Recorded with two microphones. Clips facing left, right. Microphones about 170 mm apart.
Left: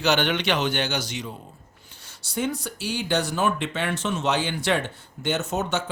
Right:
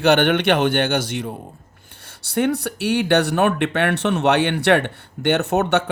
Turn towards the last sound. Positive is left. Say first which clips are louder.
# right 8 dB
turn(degrees=-65)  # may be behind; listen again after turning